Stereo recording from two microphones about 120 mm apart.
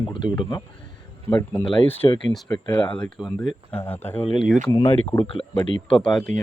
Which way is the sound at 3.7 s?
15° left (ahead or behind).